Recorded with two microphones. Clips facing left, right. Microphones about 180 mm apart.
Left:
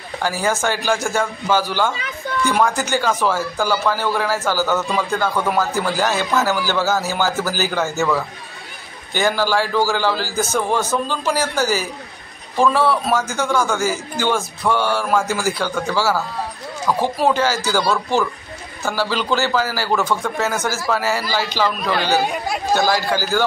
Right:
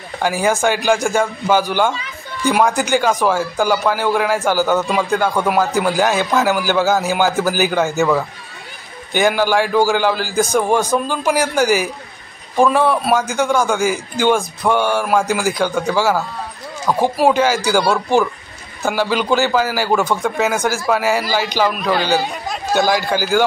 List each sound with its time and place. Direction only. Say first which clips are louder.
0.2 s speech: right 4 dB; 15° right (ahead or behind)